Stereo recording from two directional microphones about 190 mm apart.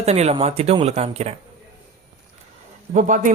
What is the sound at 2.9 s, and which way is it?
Speech, 40° right (ahead or behind).